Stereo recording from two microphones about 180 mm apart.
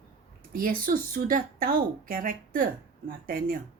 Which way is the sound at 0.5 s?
50° right (ahead or behind).